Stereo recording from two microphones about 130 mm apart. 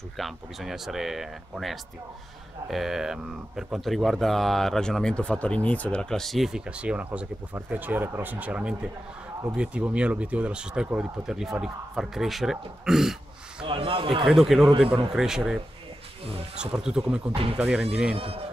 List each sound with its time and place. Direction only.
0.2 s speech: centre (ahead or behind)
13.7 s a man's voice: 45° right (ahead or behind)
14.2 s speech: centre (ahead or behind)
16.7 s speech: 5° right (ahead or behind)
17.3 s a man's voice: 45° right (ahead or behind)
17.6 s speech: 10° right (ahead or behind)
18.1 s a man's voice: 50° right (ahead or behind)